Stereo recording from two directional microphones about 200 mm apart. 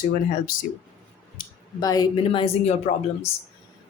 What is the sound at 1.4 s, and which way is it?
Speech, 20° left (ahead or behind).